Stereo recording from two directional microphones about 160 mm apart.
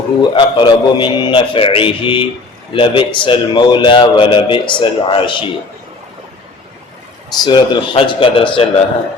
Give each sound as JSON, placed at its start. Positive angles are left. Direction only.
{"t": 0.2, "sound": "a man's voice", "side_deg": 30}
{"t": 7.4, "sound": "a man's voice", "side_deg": 30}